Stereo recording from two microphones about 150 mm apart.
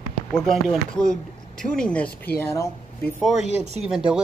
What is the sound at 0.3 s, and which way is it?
Speech, 5° left (ahead or behind).